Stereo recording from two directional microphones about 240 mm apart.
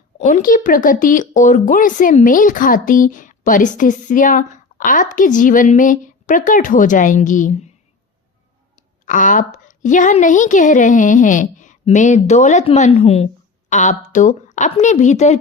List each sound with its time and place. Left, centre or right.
0.2 s speech: left
9.0 s speech: left